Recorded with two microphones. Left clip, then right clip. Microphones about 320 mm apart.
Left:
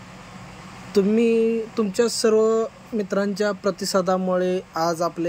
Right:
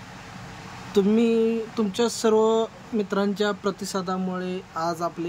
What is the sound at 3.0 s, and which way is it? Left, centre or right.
Speech, centre.